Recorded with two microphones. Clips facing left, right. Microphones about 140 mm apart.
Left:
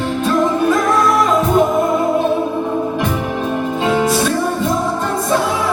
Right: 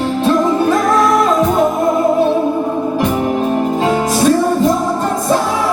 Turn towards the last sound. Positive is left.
turn(degrees=-40)  # may be behind; listen again after turning